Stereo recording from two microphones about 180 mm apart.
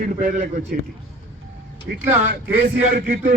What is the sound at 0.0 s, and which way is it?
Speech, 45° right (ahead or behind).